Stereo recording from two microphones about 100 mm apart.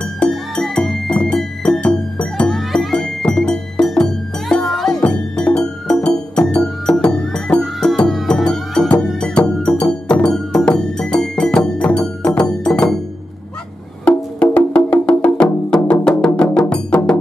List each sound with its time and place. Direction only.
0.2 s music: 5° left (ahead or behind)
14.0 s music: 10° left (ahead or behind)